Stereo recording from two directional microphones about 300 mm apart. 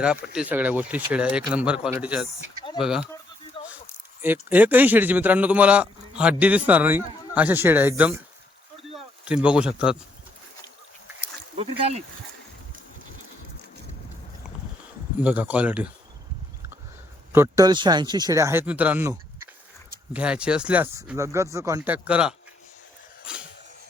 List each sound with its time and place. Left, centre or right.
0.0 s a man's voice: centre
3.6 s a sound: centre
4.2 s a man's voice: centre
11.5 s speech: right
15.2 s a man's voice: centre
17.3 s speech: centre
20.1 s a man's voice: centre
23.2 s a sound: centre